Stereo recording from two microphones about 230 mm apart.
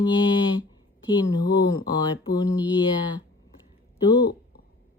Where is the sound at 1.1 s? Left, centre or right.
Centre.